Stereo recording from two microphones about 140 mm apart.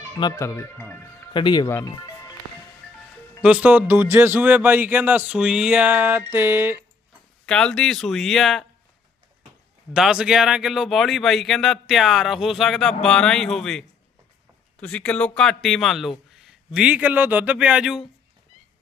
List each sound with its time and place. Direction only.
0.2 s speech: 25° left (ahead or behind)
1.3 s speech: 35° left (ahead or behind)
1.6 s speech: 20° left (ahead or behind)
3.4 s speech: 10° right (ahead or behind)
7.4 s speech: 5° left (ahead or behind)
9.9 s speech: 5° right (ahead or behind)